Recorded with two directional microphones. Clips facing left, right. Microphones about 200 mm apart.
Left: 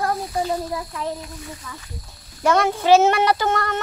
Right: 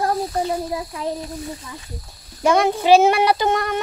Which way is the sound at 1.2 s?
35° right (ahead or behind).